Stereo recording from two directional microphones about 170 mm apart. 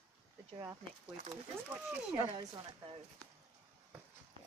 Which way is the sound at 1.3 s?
5° right (ahead or behind).